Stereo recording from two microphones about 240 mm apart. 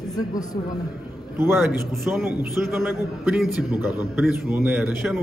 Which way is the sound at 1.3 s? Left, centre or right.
Centre.